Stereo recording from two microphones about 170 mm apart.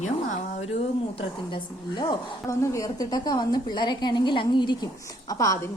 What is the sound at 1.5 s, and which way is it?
A woman's voice, 25° left (ahead or behind).